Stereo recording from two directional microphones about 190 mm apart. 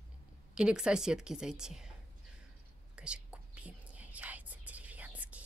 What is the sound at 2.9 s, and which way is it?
Whispering, 5° right (ahead or behind).